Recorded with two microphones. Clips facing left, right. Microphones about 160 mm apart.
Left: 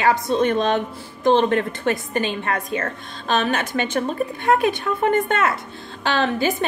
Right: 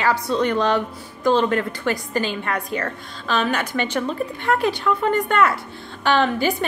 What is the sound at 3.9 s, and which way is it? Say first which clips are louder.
Speech: left 1 dB; 45° left (ahead or behind).